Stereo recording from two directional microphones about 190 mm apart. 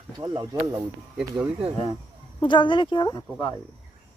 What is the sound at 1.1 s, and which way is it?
Speech, 5° right (ahead or behind).